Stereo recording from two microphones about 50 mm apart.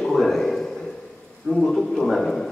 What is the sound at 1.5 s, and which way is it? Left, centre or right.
Speech, centre.